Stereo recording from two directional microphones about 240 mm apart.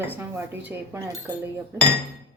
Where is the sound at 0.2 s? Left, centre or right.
Centre.